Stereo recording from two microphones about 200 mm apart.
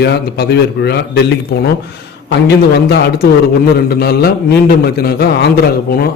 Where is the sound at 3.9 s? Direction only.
50° left (ahead or behind).